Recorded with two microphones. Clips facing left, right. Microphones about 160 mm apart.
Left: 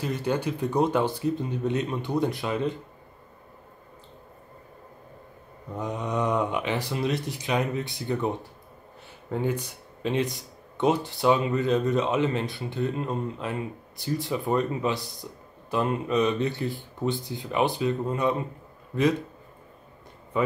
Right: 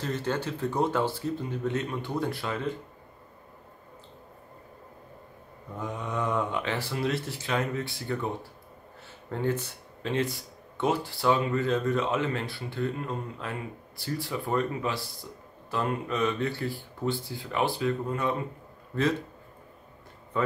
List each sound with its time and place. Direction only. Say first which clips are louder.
0.0 s speech: left 3 dB; 10° left (ahead or behind)
5.8 s speech: left 4 dB; 20° left (ahead or behind)